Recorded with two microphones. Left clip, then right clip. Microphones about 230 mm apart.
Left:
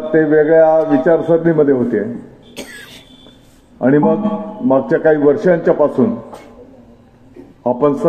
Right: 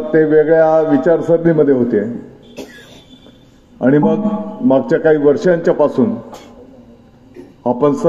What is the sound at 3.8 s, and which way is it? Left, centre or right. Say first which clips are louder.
A man's voice: even; right.